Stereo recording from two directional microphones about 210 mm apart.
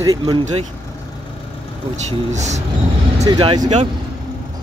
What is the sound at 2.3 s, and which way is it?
Speech, 35° right (ahead or behind).